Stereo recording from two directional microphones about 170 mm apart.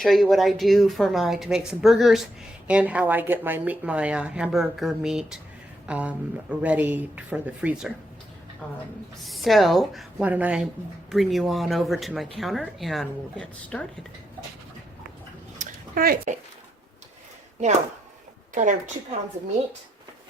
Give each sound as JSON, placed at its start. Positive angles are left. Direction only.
{"t": 0.0, "sound": "a woman's voice", "side_deg": 0}
{"t": 8.6, "sound": "a woman's voice", "side_deg": 5}
{"t": 15.5, "sound": "a sound", "side_deg": -50}
{"t": 18.5, "sound": "a woman's voice", "side_deg": -45}